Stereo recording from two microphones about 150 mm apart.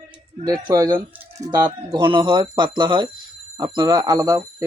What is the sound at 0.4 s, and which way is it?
Speech, 25° right (ahead or behind).